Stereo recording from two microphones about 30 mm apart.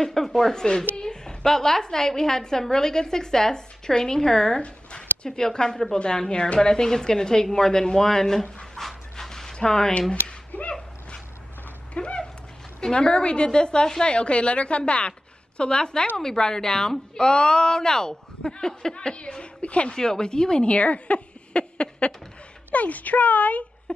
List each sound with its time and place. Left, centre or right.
0.0 s a woman's voice: centre
4.6 s zipper: left
5.3 s a woman's voice: left
8.7 s dog: centre
9.5 s speech: left
10.5 s a sound: left
12.0 s a sound: left
12.9 s a woman's voice: left
14.0 s a woman's voice: left
18.9 s a woman's voice: left
19.9 s a woman's voice: left
20.6 s speech: left
22.7 s speech: left